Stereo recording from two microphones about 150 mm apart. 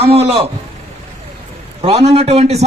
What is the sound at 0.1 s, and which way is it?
Speech, 40° right (ahead or behind).